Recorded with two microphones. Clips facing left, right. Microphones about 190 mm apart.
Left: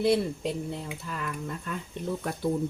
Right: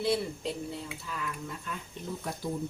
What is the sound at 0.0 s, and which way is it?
Speech, 55° left (ahead or behind).